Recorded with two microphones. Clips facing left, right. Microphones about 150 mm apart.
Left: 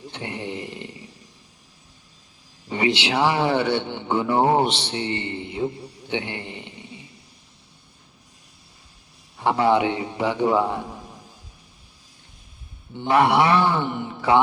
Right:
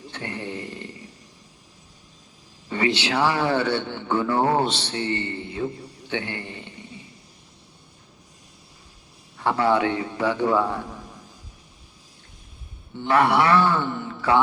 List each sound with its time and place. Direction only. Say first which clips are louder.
0.1 s a sound: left 1 dB; 20° left (ahead or behind)
2.6 s a man's voice: left 1 dB; 15° left (ahead or behind)
9.4 s a man's voice: left 2 dB; 20° left (ahead or behind)
13.0 s speech: left 1 dB; 15° left (ahead or behind)